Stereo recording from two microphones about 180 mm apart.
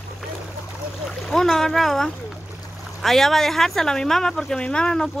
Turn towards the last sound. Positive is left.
turn(degrees=5)  # may be behind; listen again after turning